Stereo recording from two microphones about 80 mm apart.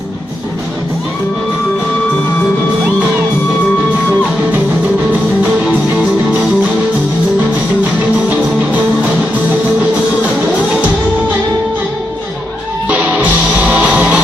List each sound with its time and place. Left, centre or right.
12.8 s music: centre